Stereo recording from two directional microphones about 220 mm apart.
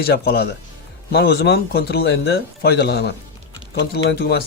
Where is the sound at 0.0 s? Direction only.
45° left (ahead or behind).